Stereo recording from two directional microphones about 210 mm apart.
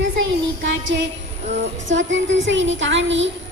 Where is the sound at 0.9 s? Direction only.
55° right (ahead or behind).